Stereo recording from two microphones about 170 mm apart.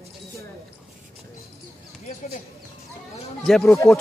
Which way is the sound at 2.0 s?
40° left (ahead or behind).